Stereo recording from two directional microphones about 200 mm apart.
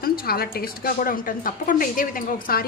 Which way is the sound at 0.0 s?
50° left (ahead or behind).